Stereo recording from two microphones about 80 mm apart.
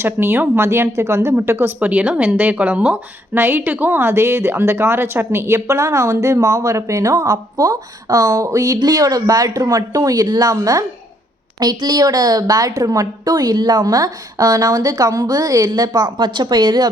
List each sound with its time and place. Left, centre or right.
0.0 s speech: right
3.3 s a woman's voice: right
8.8 s a woman's voice: right